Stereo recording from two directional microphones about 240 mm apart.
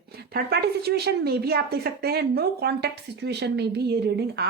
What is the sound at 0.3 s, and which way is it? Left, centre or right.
A woman's voice, right.